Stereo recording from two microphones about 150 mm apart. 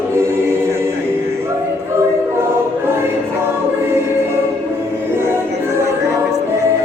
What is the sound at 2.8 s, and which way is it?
Music, 15° right (ahead or behind).